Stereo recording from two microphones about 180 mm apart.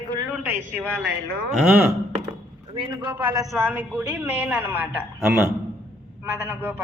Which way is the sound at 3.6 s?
10° right (ahead or behind).